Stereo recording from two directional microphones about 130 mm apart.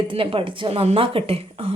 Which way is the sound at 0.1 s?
40° right (ahead or behind).